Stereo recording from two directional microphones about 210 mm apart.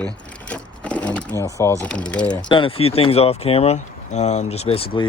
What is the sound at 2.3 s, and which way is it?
Speech, 20° left (ahead or behind).